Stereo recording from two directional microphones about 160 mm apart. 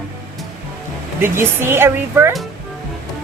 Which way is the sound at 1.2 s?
15° right (ahead or behind).